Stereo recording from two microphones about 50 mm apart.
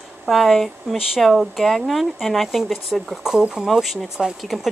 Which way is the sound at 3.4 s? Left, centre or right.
Centre.